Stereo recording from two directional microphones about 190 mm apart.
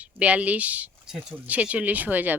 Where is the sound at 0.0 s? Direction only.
5° right (ahead or behind).